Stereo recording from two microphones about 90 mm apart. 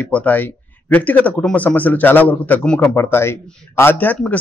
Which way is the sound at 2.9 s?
25° left (ahead or behind).